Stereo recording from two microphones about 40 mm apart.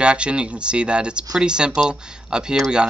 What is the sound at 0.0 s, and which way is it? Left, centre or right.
Speech, right.